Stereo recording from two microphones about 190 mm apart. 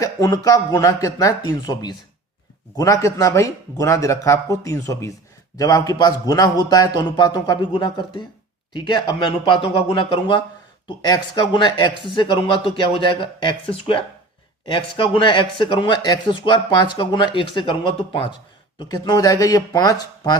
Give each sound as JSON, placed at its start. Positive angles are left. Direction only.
{"t": 0.0, "sound": "speech", "side_deg": 15}